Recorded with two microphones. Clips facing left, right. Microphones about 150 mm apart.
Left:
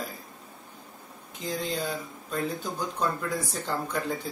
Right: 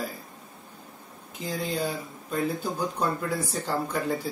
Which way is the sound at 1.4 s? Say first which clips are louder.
Right 1 dB; centre (ahead or behind).